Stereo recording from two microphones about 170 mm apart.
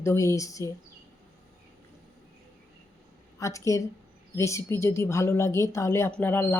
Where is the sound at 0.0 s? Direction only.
15° left (ahead or behind).